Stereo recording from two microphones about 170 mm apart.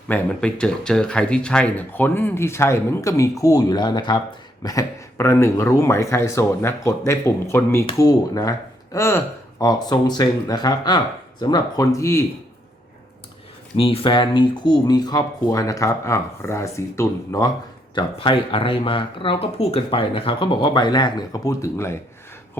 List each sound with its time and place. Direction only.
0.1 s speech: 5° left (ahead or behind)
13.7 s speech: 35° left (ahead or behind); by 17.5 s 20° left (ahead or behind)
17.9 s speech: 30° left (ahead or behind)